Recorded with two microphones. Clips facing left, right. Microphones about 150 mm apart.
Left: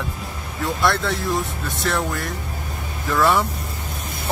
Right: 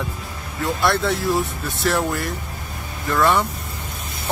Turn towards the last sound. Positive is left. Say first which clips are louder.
# even
turn(degrees=0)  # may be behind; listen again after turning